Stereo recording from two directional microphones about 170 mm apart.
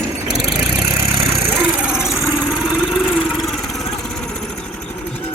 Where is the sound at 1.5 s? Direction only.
5° right (ahead or behind).